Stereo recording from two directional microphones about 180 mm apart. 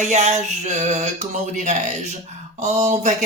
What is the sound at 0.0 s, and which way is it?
Speech, 40° right (ahead or behind).